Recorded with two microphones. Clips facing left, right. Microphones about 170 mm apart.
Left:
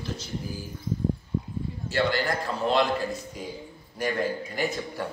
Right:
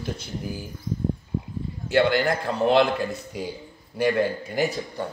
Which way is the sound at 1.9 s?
60° right (ahead or behind).